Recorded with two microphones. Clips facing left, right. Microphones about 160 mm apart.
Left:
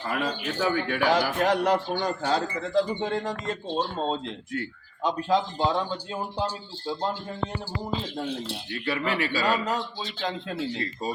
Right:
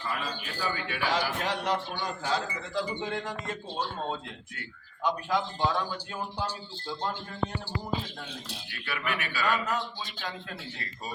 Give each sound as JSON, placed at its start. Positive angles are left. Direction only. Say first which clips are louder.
{"t": 0.0, "sound": "a man's voice", "louder": "left 6 dB", "side_deg": 65}
{"t": 1.4, "sound": "speech", "louder": "left 7 dB", "side_deg": 45}
{"t": 3.8, "sound": "speech", "louder": "left 5 dB", "side_deg": 25}
{"t": 8.4, "sound": "speech", "louder": "left 9 dB", "side_deg": 30}